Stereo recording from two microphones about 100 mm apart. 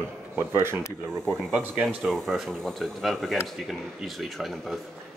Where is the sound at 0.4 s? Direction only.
25° right (ahead or behind).